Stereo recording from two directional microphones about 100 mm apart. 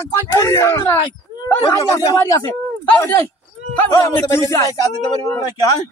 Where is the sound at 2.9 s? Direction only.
25° left (ahead or behind).